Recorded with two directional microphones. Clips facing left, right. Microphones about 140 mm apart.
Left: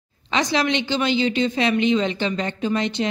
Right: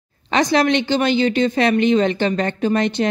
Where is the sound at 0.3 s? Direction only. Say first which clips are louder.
Right 5 dB; 50° right (ahead or behind).